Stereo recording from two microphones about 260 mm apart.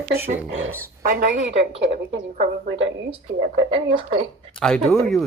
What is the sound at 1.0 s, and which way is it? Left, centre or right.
Speech, right.